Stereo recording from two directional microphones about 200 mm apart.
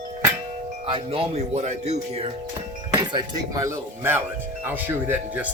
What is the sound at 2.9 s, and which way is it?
Speech, 20° right (ahead or behind).